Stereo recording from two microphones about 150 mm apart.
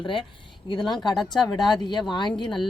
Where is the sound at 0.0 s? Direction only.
35° left (ahead or behind).